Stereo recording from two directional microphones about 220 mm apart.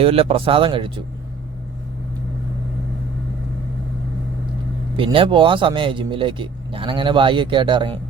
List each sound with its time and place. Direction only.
0.0 s speech: 25° right (ahead or behind)
4.9 s speech: 25° right (ahead or behind)